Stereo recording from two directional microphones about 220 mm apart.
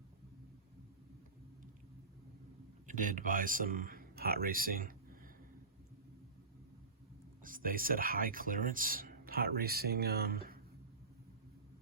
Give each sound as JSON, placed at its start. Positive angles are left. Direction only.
{"t": 2.8, "sound": "speech", "side_deg": -35}
{"t": 7.4, "sound": "speech", "side_deg": -40}